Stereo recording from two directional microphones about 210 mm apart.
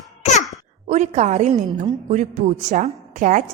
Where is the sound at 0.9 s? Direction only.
35° right (ahead or behind).